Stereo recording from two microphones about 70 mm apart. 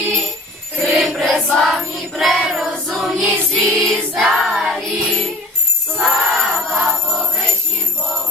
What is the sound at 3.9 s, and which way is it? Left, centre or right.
Choir, centre.